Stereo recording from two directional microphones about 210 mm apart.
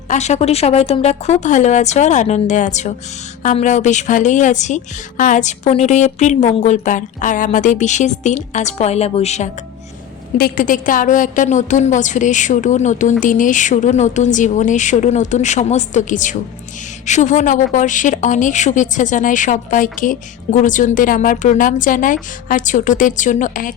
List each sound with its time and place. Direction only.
0.1 s a woman's voice: 30° left (ahead or behind)
10.3 s a woman's voice: 45° left (ahead or behind)